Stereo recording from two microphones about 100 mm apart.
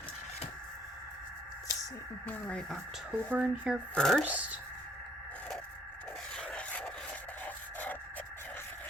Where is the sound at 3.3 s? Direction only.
15° right (ahead or behind).